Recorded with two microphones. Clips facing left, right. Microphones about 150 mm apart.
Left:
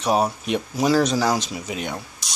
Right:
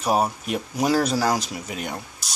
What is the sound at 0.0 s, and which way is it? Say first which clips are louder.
Speech: left 1 dB; 5° right (ahead or behind).